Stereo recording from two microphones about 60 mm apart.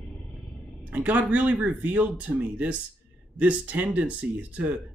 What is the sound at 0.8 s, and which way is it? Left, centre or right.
Speech, right.